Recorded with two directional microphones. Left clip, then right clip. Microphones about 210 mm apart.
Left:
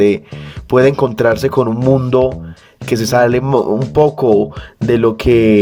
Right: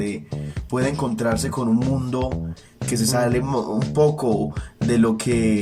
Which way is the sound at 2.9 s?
50° left (ahead or behind).